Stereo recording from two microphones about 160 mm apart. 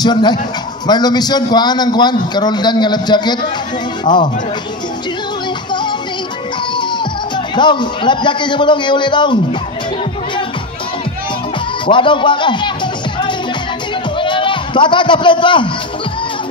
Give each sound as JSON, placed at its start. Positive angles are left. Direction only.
{"t": 0.0, "sound": "a man's voice", "side_deg": 25}
{"t": 5.7, "sound": "music", "side_deg": 30}
{"t": 6.7, "sound": "speech", "side_deg": 30}
{"t": 11.8, "sound": "a man's voice", "side_deg": 30}
{"t": 14.1, "sound": "a sound", "side_deg": 30}